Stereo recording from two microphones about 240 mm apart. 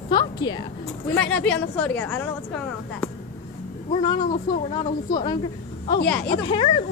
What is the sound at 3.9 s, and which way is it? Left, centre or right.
A woman's voice, centre.